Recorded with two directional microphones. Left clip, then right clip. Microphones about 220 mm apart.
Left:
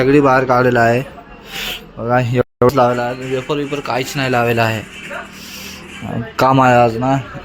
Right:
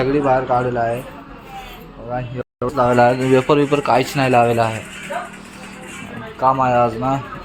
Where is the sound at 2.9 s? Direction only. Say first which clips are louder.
Right 6 dB; 20° right (ahead or behind); by 4.5 s centre (ahead or behind).